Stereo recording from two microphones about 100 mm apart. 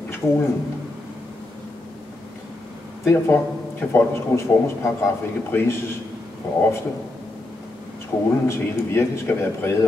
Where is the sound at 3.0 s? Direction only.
25° left (ahead or behind).